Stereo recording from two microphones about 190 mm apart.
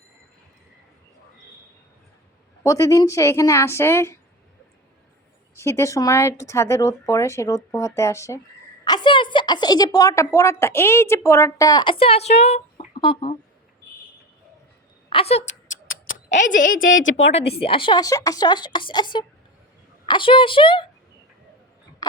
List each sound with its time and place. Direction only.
2.6 s speech: 15° left (ahead or behind)
5.5 s a woman's voice: 15° left (ahead or behind)
15.1 s speech: 30° left (ahead or behind)
15.7 s a sound: 90° left
16.6 s a woman's voice: 45° left (ahead or behind)
16.8 s a woman's voice: 85° left
17.6 s a woman's voice: 25° left (ahead or behind)